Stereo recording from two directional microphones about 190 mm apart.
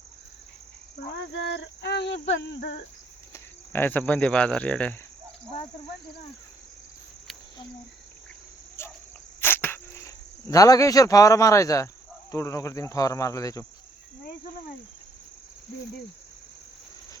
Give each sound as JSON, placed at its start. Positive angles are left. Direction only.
{"t": 1.0, "sound": "cricket", "side_deg": 70}
{"t": 3.3, "sound": "cricket", "side_deg": 10}
{"t": 8.8, "sound": "cricket", "side_deg": 15}